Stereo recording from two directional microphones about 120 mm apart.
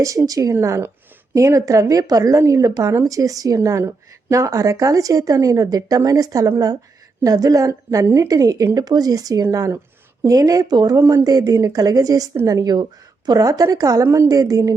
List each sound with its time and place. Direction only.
0.0 s a woman's voice: 30° right (ahead or behind)